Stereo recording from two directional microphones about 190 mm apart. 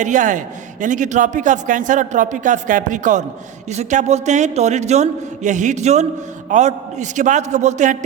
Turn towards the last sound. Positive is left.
turn(degrees=-40)  # may be behind; listen again after turning